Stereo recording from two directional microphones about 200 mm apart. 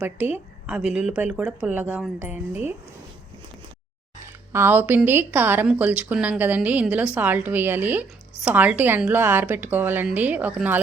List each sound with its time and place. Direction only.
0.0 s speech: 10° right (ahead or behind)
4.3 s speech: 10° right (ahead or behind)